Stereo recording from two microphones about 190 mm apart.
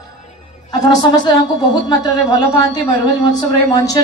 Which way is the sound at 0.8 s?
20° left (ahead or behind).